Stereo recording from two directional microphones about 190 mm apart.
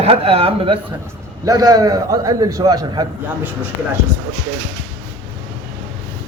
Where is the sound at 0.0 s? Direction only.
30° right (ahead or behind).